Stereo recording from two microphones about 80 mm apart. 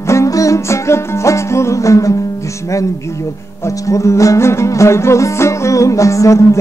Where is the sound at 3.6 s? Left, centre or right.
Left.